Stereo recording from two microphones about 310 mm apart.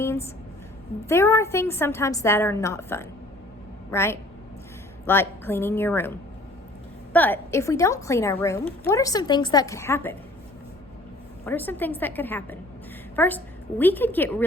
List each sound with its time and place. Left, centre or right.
0.0 s a sound: centre
1.0 s a woman's voice: centre
11.4 s a woman's voice: centre